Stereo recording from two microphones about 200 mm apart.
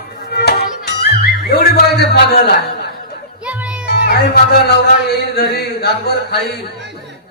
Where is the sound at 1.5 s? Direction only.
55° left (ahead or behind).